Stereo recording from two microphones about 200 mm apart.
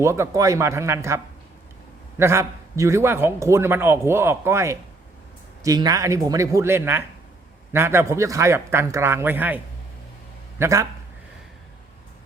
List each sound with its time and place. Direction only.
0.0 s a man's voice: 15° right (ahead or behind)
10.6 s a man's voice: 15° right (ahead or behind)